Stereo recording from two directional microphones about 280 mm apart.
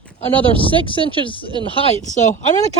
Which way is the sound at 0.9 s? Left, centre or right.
Centre.